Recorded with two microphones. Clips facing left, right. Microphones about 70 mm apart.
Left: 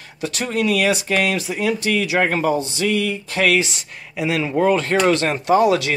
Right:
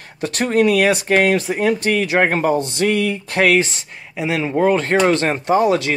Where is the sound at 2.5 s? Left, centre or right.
Right.